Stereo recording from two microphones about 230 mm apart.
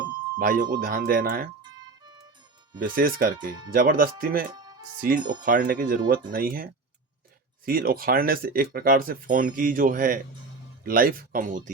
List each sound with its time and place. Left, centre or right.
0.3 s speech: right
2.7 s speech: right
4.5 s music: centre
4.9 s speech: right